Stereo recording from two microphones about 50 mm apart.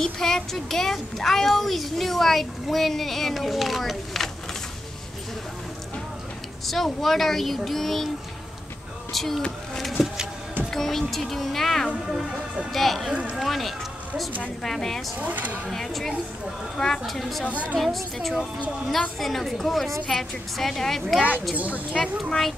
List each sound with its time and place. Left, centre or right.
0.0 s a child's voice: centre
6.6 s a child's voice: centre
9.1 s a child's voice: centre
9.8 s bee: centre
10.7 s a child's voice: centre
12.2 s speech: centre
12.7 s a child's voice: centre
15.1 s speech: right
15.7 s a child's voice: centre
17.0 s a child's voice: centre
21.5 s speech: right